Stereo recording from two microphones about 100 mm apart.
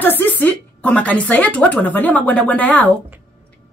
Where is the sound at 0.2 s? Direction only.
15° left (ahead or behind).